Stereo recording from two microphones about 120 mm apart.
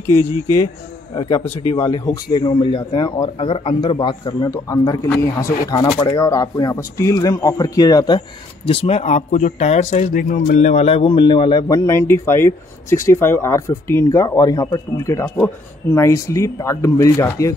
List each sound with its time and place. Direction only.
0.0 s speech: 25° left (ahead or behind)
1.5 s speech: 55° left (ahead or behind)
1.8 s a man's voice: 35° left (ahead or behind)
8.6 s speech: 55° left (ahead or behind)
11.6 s speech: 25° left (ahead or behind)